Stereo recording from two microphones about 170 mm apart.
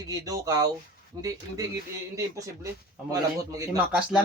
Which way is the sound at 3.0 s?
20° right (ahead or behind).